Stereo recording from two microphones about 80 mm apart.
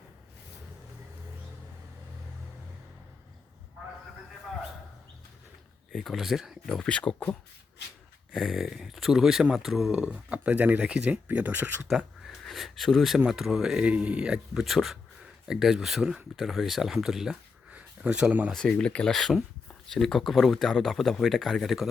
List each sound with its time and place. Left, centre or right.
5.9 s speech: centre
6.7 s speech: centre
8.3 s speech: centre
10.0 s speech: centre
12.3 s speech: centre
17.7 s a sound: centre
18.5 s speech: centre